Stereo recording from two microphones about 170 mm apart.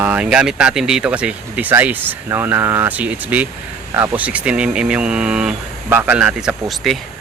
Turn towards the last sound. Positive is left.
turn(degrees=0)  # may be behind; listen again after turning